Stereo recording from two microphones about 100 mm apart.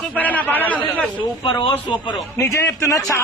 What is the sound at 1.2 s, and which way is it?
Speech, 60° left (ahead or behind).